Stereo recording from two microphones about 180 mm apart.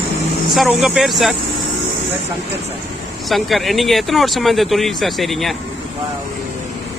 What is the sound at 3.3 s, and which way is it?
Speech, centre (ahead or behind).